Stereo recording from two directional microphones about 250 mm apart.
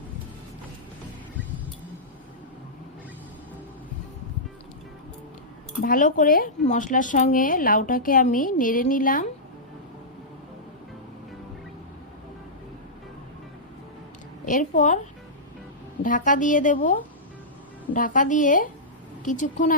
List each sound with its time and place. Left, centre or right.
5.8 s speech: left
14.4 s a woman's voice: left
16.0 s speech: left